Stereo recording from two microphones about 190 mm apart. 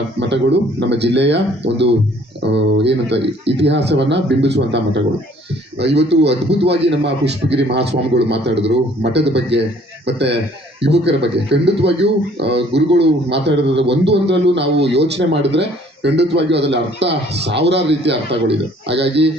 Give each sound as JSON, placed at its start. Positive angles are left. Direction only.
{"t": 0.2, "sound": "speech", "side_deg": -65}